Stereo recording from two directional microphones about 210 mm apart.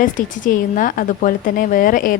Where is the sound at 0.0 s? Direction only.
40° left (ahead or behind).